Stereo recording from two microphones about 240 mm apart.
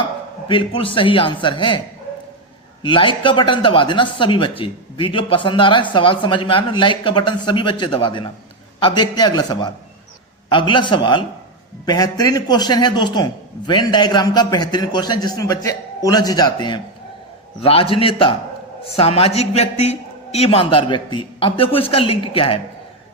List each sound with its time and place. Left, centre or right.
0.4 s a man's voice: left
2.8 s a man's voice: left